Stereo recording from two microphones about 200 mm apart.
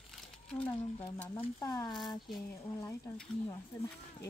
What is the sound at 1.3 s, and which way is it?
Speech, 20° left (ahead or behind).